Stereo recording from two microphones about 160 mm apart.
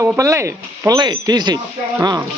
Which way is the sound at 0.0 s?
15° right (ahead or behind).